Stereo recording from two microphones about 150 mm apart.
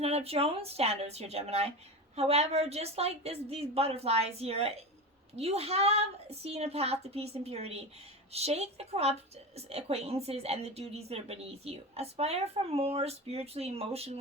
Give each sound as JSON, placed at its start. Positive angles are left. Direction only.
{"t": 0.0, "sound": "a woman's voice", "side_deg": -40}